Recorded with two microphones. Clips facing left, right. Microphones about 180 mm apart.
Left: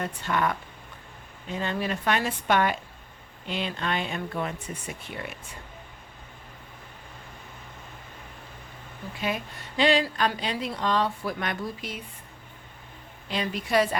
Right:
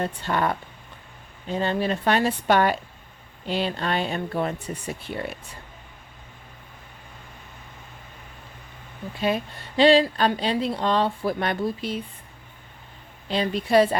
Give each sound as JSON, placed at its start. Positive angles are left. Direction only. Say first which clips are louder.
{"t": 0.0, "sound": "speech", "louder": "right 3 dB", "side_deg": -30}
{"t": 9.2, "sound": "speech", "louder": "right 6 dB", "side_deg": -30}
{"t": 13.2, "sound": "speech", "louder": "right 5 dB", "side_deg": -30}